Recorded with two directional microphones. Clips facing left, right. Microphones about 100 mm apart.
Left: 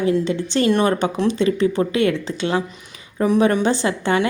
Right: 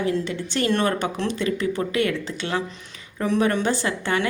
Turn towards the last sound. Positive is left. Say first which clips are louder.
# left 5 dB
turn(degrees=25)  # may be behind; listen again after turning